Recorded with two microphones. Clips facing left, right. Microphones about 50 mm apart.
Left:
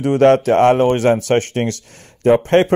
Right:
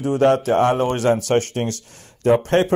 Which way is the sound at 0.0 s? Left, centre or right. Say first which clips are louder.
Left 5 dB; left.